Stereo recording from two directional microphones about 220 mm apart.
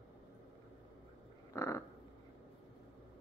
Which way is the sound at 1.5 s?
15° left (ahead or behind).